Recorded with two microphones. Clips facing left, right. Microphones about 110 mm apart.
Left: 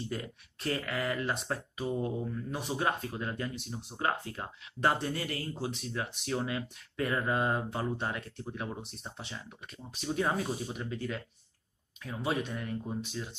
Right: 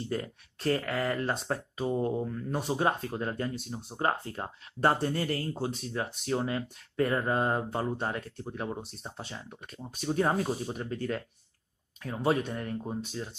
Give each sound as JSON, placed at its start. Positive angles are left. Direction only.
{"t": 0.1, "sound": "speech", "side_deg": -35}